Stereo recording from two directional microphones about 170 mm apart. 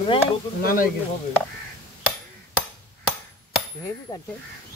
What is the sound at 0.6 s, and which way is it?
Speech, 55° left (ahead or behind).